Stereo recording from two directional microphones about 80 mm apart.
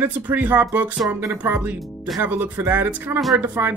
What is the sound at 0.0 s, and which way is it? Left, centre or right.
Speech, right.